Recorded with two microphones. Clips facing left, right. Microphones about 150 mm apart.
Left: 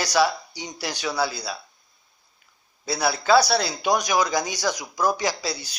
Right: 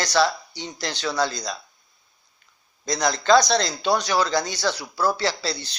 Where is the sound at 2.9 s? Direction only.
10° left (ahead or behind).